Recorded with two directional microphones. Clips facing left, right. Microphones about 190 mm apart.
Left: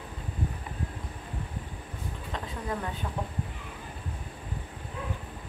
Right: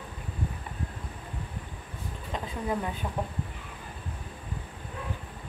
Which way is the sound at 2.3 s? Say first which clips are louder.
Right 4 dB; 15° right (ahead or behind).